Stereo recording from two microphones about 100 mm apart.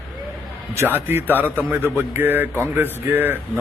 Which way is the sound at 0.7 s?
25° right (ahead or behind).